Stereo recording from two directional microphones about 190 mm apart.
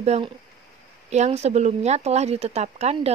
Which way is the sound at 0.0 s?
35° right (ahead or behind).